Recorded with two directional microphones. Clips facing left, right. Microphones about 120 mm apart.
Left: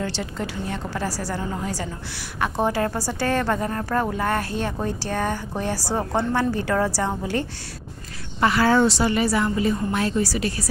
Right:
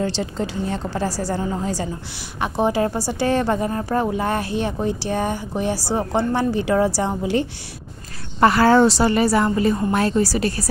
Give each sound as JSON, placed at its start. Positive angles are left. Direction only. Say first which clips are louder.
{"t": 0.0, "sound": "a woman's voice", "louder": "right 4 dB", "side_deg": -25}
{"t": 8.4, "sound": "a woman's voice", "louder": "right 4 dB", "side_deg": -45}